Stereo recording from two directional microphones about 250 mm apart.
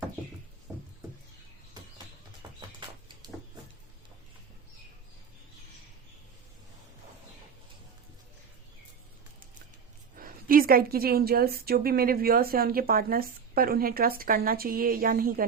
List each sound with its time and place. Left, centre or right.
0.7 s a sound: centre
2.4 s music: centre
10.2 s a woman's voice: right